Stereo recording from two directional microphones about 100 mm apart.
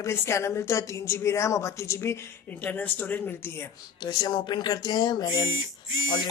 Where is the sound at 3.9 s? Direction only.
45° left (ahead or behind).